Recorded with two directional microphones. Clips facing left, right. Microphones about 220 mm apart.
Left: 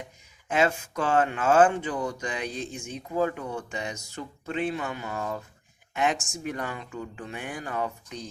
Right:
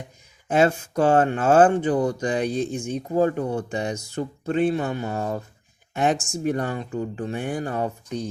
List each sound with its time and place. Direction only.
0.4 s speech: 35° right (ahead or behind)